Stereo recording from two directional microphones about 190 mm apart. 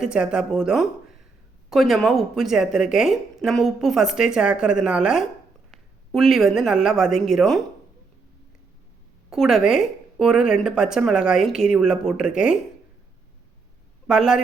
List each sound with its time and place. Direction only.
0.0 s a woman's voice: 5° right (ahead or behind)
9.3 s a woman's voice: centre (ahead or behind)
14.1 s a woman's voice: 5° right (ahead or behind)